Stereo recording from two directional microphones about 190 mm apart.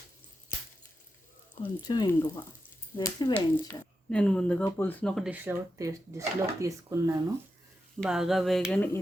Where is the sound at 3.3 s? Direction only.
5° left (ahead or behind); by 7.2 s 15° right (ahead or behind).